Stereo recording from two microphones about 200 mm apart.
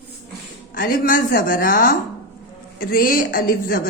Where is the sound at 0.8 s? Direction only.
45° left (ahead or behind).